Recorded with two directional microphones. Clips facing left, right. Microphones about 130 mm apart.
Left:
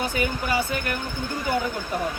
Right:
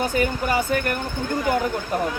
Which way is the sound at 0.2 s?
45° right (ahead or behind).